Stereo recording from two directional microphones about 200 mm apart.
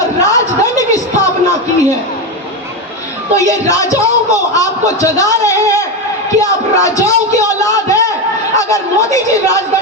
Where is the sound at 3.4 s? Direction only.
15° left (ahead or behind).